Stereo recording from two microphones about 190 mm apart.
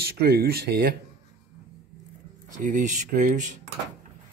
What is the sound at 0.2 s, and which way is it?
Speech, 55° right (ahead or behind).